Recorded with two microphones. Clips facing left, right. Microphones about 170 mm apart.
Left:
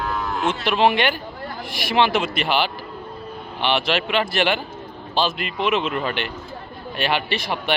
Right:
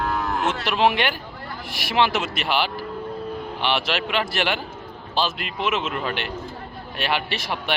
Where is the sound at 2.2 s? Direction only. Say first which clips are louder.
Left 3 dB; 5° right (ahead or behind).